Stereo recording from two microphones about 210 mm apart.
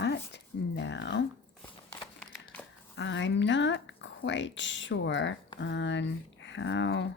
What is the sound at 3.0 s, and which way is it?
Speech, 60° left (ahead or behind).